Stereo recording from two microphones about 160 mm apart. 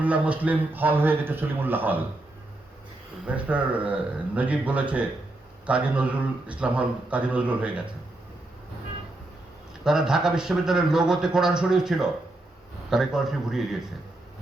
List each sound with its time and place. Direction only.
0.0 s speech: 10° right (ahead or behind)
3.2 s speech: 10° right (ahead or behind)
9.8 s speech: 5° right (ahead or behind)